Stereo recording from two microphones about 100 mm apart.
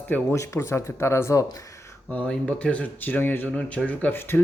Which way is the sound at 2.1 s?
10° left (ahead or behind).